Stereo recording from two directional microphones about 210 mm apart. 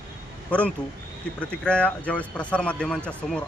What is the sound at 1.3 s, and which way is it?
A man's voice, 5° left (ahead or behind).